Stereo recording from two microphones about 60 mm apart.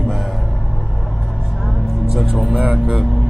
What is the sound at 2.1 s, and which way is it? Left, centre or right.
Speech, centre.